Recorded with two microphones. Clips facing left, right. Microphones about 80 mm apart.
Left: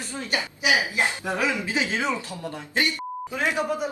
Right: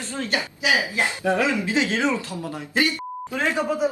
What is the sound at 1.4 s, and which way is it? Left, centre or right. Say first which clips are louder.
Speech: right 3 dB; right.